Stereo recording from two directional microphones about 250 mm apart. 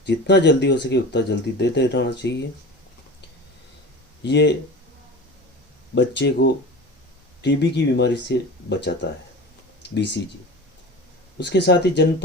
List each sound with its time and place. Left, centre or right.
0.0 s speech: left
4.2 s speech: left
5.9 s speech: left
11.3 s speech: left